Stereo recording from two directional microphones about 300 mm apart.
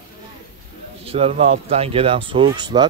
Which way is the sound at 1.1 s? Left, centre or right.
Centre.